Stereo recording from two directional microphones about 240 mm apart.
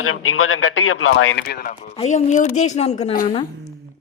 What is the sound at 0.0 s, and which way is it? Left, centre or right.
A man's voice, left.